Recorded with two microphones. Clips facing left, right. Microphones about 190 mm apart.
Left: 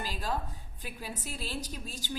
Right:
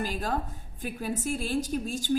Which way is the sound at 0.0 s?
50° right (ahead or behind).